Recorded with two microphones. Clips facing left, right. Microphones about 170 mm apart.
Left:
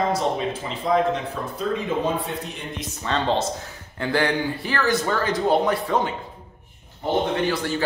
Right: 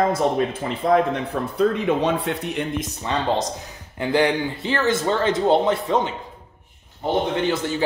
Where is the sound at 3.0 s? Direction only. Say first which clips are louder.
Left 1 dB; 15° right (ahead or behind).